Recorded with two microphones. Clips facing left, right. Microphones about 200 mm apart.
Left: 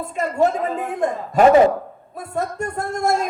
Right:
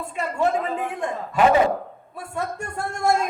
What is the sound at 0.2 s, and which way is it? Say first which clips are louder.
A man's voice: left 4 dB; 40° left (ahead or behind).